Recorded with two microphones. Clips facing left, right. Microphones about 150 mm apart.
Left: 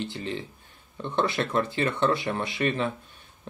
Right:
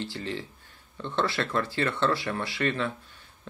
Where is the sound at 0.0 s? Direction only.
20° left (ahead or behind).